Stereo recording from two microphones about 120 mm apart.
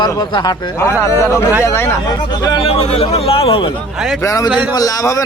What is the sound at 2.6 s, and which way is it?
Speech, 55° left (ahead or behind).